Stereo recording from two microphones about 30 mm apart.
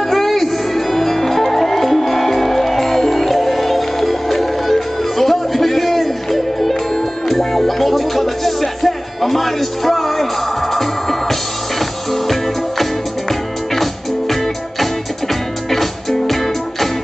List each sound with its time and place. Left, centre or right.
0.1 s music: centre
15.7 s music: centre